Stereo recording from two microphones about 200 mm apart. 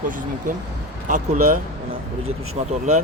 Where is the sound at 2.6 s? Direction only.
30° right (ahead or behind).